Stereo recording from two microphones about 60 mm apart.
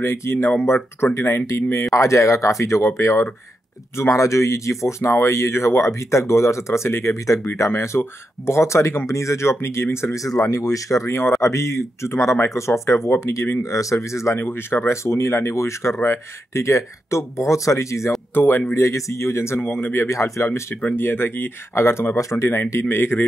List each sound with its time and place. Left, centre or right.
0.0 s speech: left
10.1 s speech: left
11.4 s speech: left
13.6 s speech: left
14.4 s speech: left
18.3 s speech: left
18.8 s speech: left
19.6 s speech: left
20.1 s speech: left
20.9 s speech: left
22.7 s speech: left